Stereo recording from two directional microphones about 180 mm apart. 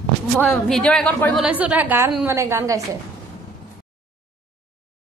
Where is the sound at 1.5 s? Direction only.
10° right (ahead or behind).